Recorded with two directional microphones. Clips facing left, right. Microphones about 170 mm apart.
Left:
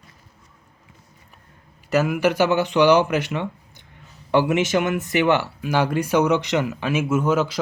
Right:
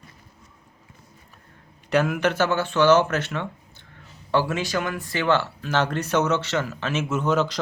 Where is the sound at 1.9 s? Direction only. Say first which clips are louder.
Left 2 dB; 5° left (ahead or behind).